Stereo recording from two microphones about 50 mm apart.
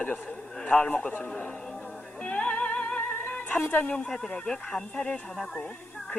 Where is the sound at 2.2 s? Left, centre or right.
Left.